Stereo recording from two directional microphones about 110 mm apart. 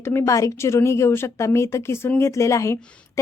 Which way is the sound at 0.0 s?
25° left (ahead or behind).